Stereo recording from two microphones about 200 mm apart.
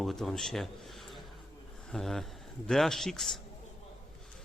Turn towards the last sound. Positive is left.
turn(degrees=0)  # may be behind; listen again after turning